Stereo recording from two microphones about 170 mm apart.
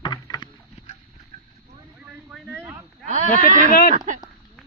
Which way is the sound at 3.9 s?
50° right (ahead or behind).